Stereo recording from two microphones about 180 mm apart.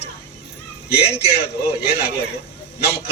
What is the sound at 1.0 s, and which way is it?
A man's voice, 65° left (ahead or behind).